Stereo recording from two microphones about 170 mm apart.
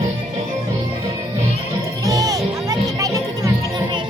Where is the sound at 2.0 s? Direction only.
20° right (ahead or behind).